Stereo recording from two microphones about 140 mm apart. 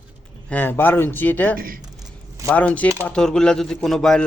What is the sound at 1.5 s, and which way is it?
Speech, 90° right.